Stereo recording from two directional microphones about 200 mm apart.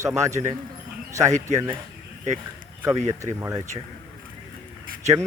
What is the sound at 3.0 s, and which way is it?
Speech, 15° right (ahead or behind).